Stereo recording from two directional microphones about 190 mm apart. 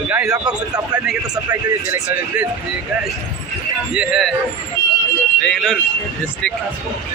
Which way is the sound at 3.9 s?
5° right (ahead or behind).